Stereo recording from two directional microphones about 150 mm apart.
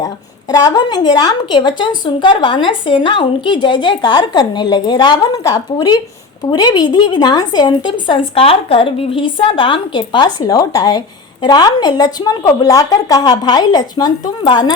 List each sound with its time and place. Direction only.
0.0 s a woman's voice: 25° left (ahead or behind)